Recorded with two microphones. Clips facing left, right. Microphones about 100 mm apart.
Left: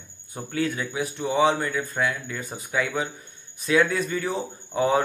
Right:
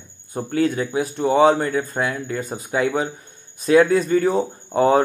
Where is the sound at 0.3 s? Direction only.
40° right (ahead or behind).